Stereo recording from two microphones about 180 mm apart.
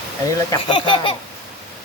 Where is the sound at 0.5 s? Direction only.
25° left (ahead or behind).